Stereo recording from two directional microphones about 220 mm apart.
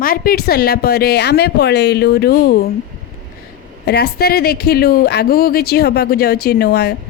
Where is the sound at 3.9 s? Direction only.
45° left (ahead or behind).